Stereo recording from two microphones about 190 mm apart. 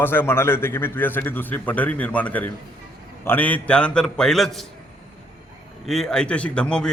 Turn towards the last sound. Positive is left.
turn(degrees=5)  # may be behind; listen again after turning